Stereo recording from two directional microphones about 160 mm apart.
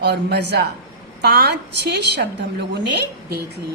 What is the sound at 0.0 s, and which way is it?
A woman's voice, 90° right.